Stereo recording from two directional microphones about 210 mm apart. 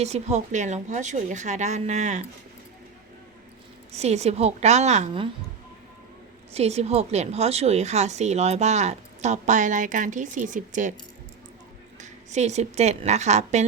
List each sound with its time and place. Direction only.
0.0 s speech: 30° right (ahead or behind)
3.9 s speech: 30° right (ahead or behind)
6.5 s speech: 30° right (ahead or behind)
11.9 s a woman's voice: 35° right (ahead or behind)